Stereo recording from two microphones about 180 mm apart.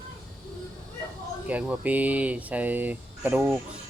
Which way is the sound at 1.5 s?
10° right (ahead or behind).